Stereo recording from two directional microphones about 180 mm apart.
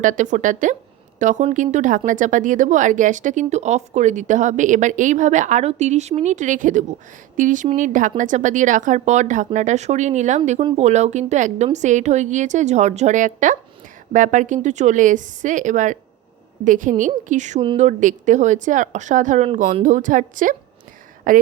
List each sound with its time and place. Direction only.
0.0 s a woman's voice: 45° right (ahead or behind)